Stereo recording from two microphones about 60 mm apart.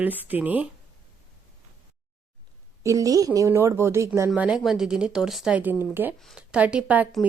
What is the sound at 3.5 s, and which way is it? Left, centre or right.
Speech, right.